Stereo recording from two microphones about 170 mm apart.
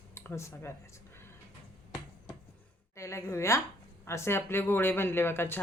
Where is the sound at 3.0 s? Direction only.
15° left (ahead or behind).